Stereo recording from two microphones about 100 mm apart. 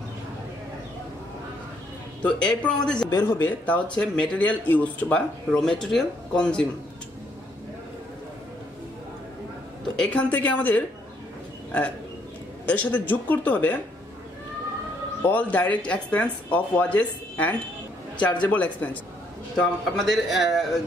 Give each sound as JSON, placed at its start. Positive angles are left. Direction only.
{"t": 2.2, "sound": "speech", "side_deg": 15}
{"t": 3.1, "sound": "a man's voice", "side_deg": 25}
{"t": 9.9, "sound": "speech", "side_deg": 10}
{"t": 12.6, "sound": "speech", "side_deg": 15}
{"t": 15.2, "sound": "speech", "side_deg": 15}
{"t": 19.5, "sound": "a man's voice", "side_deg": 5}